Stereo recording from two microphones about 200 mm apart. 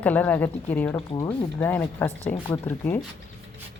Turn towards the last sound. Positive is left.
turn(degrees=10)  # may be behind; listen again after turning